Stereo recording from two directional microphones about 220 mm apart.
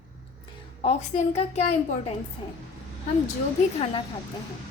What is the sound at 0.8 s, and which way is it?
A woman's voice, 30° left (ahead or behind).